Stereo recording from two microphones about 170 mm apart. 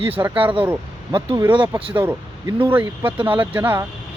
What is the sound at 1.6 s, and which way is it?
Speech, 35° right (ahead or behind).